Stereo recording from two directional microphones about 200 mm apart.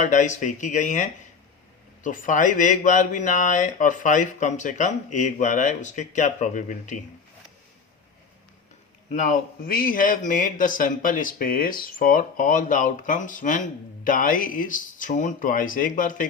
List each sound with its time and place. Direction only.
0.0 s speech: 40° left (ahead or behind)
9.1 s speech: 40° left (ahead or behind)